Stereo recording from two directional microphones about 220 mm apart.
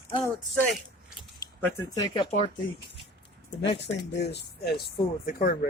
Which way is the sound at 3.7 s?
55° left (ahead or behind).